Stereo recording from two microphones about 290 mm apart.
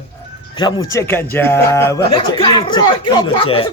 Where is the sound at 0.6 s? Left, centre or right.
Centre.